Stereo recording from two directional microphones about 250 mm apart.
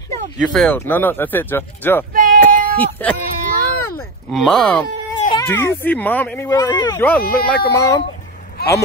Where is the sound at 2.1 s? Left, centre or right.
Right.